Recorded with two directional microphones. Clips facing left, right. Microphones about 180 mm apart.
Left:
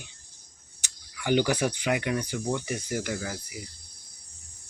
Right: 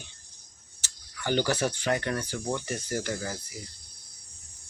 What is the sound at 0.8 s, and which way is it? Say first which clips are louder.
Speech: even; 10° left (ahead or behind).